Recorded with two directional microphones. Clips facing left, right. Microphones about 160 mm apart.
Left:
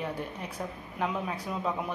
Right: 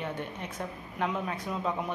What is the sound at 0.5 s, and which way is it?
Speech, 5° left (ahead or behind).